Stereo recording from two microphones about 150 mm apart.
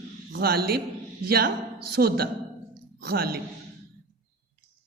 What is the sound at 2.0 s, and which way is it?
A woman's voice, 90° right.